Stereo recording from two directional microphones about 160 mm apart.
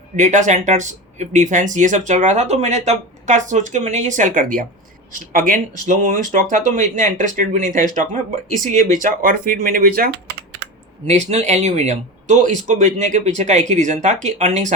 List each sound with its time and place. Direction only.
0.2 s speech: 50° right (ahead or behind)
11.0 s speech: 45° right (ahead or behind)